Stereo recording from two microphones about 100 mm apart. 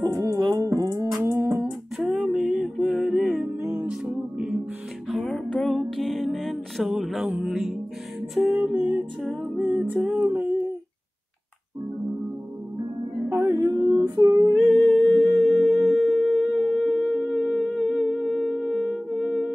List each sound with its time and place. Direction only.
0.0 s music: 30° right (ahead or behind)
1.2 s humming: 25° right (ahead or behind)
2.0 s music: 5° right (ahead or behind)
5.1 s music: 5° left (ahead or behind)
7.2 s music: 15° right (ahead or behind)
9.9 s humming: 10° right (ahead or behind)
13.3 s a sound: 25° right (ahead or behind)
14.5 s music: centre (ahead or behind)